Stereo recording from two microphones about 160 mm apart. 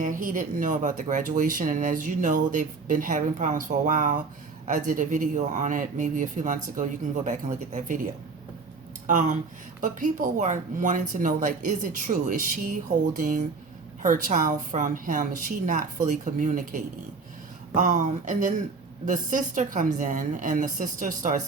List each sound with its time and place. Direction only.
0.0 s speech: 55° right (ahead or behind)
9.8 s speech: 55° right (ahead or behind)